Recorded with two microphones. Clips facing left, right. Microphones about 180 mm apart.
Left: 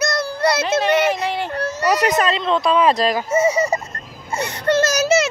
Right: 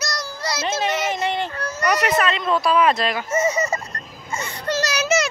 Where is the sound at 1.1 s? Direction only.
Centre (ahead or behind).